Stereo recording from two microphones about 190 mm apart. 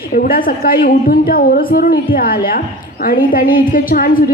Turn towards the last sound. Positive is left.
turn(degrees=50)  # may be behind; listen again after turning